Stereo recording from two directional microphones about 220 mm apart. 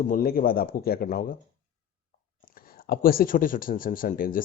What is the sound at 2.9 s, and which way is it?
Speech, 40° left (ahead or behind).